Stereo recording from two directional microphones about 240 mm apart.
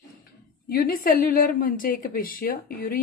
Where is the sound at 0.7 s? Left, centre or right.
Left.